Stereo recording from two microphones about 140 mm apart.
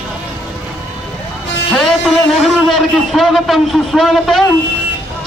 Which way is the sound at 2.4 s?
Centre (ahead or behind).